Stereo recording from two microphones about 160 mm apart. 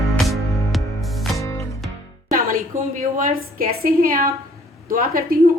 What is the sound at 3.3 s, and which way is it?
A woman's voice, 65° right (ahead or behind).